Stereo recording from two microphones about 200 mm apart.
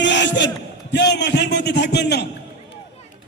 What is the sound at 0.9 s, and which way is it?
A man's voice, 60° left (ahead or behind).